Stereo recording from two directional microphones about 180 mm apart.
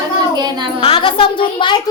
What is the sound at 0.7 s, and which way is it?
A woman's voice, 30° left (ahead or behind).